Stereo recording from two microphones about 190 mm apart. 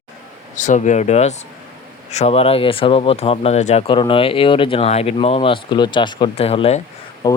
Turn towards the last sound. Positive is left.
turn(degrees=20)  # may be behind; listen again after turning